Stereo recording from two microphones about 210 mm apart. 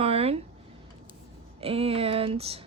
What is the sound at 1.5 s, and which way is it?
Speech, 30° right (ahead or behind).